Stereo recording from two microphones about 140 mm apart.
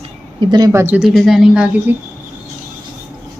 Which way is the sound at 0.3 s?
30° right (ahead or behind).